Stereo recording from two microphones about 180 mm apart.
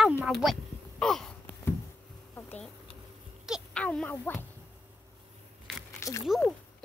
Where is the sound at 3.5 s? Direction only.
5° left (ahead or behind).